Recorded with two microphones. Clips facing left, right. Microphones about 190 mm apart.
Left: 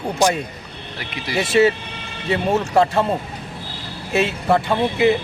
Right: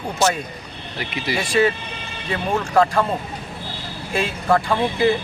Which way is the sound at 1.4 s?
25° left (ahead or behind).